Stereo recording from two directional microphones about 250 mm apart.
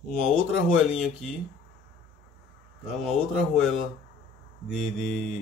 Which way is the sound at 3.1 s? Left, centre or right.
Centre.